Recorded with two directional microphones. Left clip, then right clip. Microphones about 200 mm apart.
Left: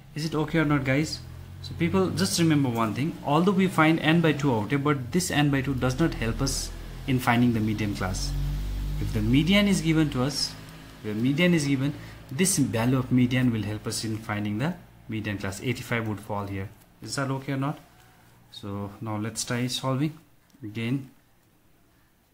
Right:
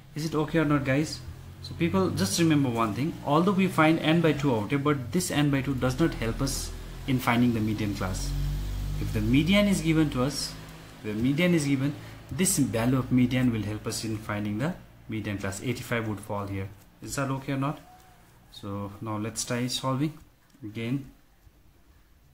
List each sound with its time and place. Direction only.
0.1 s speech: 10° left (ahead or behind)